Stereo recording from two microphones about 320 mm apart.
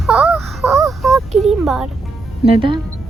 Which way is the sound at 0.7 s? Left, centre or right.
Centre.